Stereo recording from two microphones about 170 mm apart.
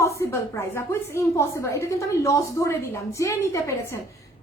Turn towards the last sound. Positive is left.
turn(degrees=15)  # may be behind; listen again after turning